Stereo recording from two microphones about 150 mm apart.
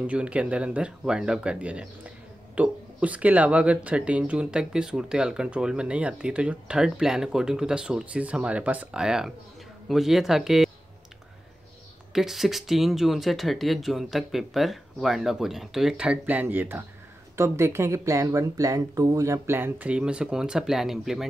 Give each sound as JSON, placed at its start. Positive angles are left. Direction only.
{"t": 0.0, "sound": "speech", "side_deg": -10}
{"t": 12.1, "sound": "speech", "side_deg": 0}